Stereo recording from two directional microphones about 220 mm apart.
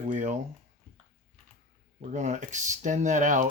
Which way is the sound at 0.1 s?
35° right (ahead or behind).